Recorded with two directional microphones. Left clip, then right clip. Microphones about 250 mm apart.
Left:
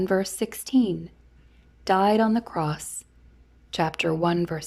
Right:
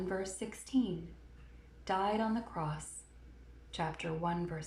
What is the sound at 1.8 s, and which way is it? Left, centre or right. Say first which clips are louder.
A woman's voice: left 13 dB; left.